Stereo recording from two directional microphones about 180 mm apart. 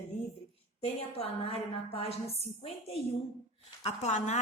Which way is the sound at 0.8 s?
35° left (ahead or behind).